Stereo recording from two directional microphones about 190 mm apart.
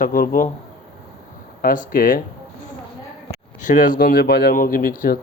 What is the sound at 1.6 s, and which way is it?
Speech, 45° left (ahead or behind).